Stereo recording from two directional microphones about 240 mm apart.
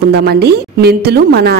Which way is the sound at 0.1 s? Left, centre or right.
Right.